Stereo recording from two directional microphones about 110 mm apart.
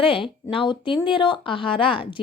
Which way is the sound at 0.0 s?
55° left (ahead or behind).